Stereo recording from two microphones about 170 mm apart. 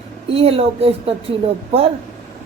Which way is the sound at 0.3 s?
35° right (ahead or behind).